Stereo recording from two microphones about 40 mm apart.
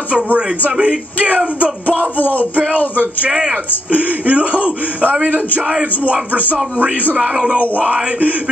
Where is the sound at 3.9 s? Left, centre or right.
Right.